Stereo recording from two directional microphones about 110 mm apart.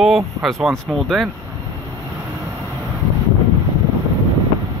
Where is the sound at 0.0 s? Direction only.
Centre (ahead or behind).